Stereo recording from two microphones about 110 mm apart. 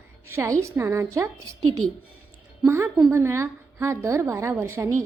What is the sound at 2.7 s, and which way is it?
A woman's voice, 25° right (ahead or behind).